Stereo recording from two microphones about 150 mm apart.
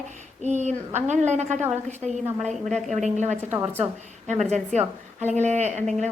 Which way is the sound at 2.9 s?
50° right (ahead or behind).